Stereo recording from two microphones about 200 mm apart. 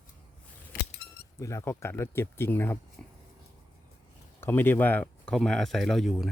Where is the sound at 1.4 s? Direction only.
15° left (ahead or behind).